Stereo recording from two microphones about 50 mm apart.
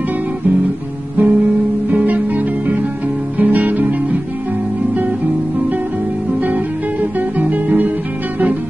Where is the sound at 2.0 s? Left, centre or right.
Right.